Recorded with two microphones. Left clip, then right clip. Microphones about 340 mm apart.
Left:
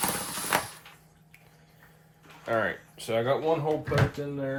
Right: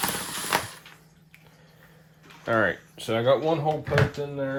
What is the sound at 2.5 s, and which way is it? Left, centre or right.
Speech, right.